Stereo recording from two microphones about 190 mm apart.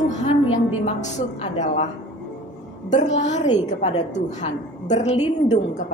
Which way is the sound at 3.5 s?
25° left (ahead or behind).